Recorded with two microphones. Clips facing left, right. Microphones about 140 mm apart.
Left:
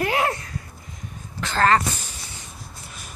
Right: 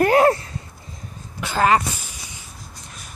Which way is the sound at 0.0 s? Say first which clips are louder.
Right 8 dB; 40° right (ahead or behind).